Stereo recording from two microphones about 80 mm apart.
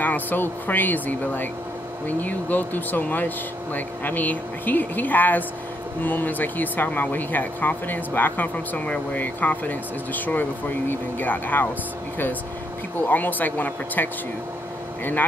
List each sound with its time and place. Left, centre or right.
0.0 s speech: left
13.1 s speech: left